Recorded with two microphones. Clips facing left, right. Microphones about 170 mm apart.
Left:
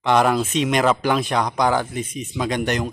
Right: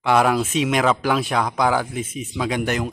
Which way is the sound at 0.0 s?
5° right (ahead or behind).